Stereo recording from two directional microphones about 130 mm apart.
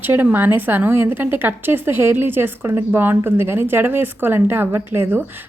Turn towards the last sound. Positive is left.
turn(degrees=-20)  # may be behind; listen again after turning